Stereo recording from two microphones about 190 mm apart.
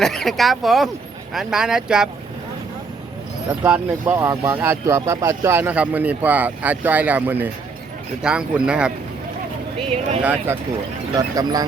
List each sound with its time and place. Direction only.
0.0 s speech: centre (ahead or behind)
3.6 s speech: 10° right (ahead or behind)
10.2 s speech: 10° right (ahead or behind)